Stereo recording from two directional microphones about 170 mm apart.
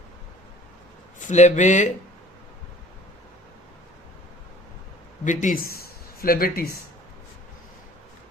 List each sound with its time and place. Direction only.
1.3 s speech: 45° left (ahead or behind)
5.2 s speech: 45° left (ahead or behind)
6.1 s speech: 60° left (ahead or behind)